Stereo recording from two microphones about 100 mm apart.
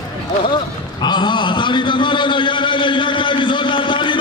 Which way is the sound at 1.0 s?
50° left (ahead or behind).